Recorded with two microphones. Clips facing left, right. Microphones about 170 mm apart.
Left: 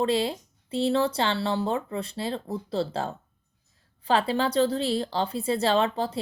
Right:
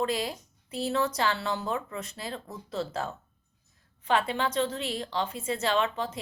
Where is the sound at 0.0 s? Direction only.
30° left (ahead or behind).